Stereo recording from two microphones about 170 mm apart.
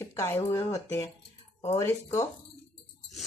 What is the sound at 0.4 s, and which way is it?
Speech, 20° left (ahead or behind).